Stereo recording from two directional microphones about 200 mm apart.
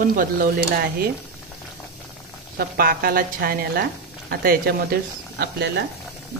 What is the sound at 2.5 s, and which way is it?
Speech, 50° right (ahead or behind).